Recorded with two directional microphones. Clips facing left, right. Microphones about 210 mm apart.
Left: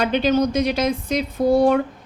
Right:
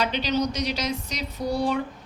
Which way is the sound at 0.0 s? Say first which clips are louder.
Left 7 dB; 50° left (ahead or behind).